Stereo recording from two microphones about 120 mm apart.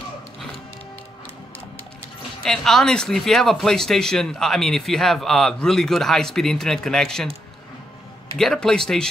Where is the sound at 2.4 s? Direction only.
5° left (ahead or behind).